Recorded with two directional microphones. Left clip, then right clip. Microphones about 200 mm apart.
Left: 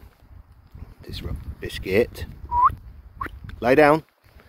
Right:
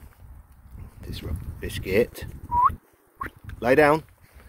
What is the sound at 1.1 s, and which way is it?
Speech, 5° left (ahead or behind).